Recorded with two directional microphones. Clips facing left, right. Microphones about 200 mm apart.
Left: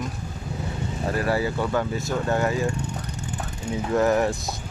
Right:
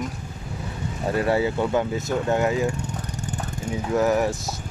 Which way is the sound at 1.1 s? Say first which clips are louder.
Right 3 dB; 20° right (ahead or behind).